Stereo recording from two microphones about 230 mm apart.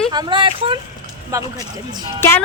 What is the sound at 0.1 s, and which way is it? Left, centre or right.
Speech, centre.